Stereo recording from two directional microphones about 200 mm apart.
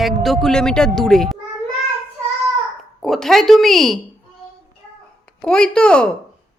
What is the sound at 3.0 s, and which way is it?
Speech, centre (ahead or behind).